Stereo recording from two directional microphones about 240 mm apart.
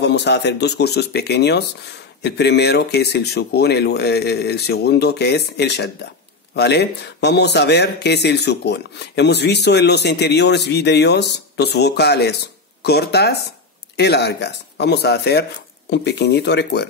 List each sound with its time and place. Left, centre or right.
0.0 s speech: left